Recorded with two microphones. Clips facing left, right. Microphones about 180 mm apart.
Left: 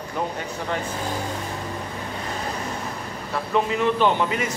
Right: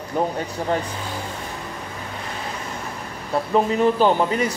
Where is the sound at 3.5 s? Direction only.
35° right (ahead or behind).